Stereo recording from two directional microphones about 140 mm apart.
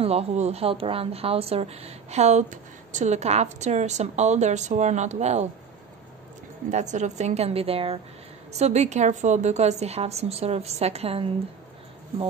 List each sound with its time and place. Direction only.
0.0 s speech: 45° right (ahead or behind)
6.7 s speech: 60° right (ahead or behind)